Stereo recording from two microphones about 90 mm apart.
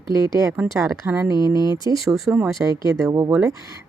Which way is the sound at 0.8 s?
35° right (ahead or behind).